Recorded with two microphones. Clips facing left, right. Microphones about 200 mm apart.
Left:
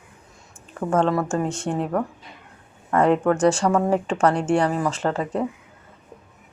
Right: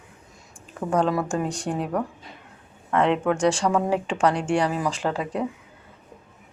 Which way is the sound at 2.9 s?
5° left (ahead or behind).